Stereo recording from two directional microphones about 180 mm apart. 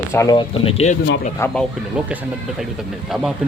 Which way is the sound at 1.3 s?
10° left (ahead or behind).